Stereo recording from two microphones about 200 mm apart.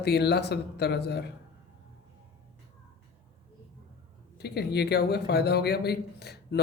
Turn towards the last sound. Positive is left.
turn(degrees=55)  # may be behind; listen again after turning